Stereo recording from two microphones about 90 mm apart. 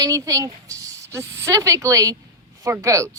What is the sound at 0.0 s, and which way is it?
A woman's voice, 40° right (ahead or behind).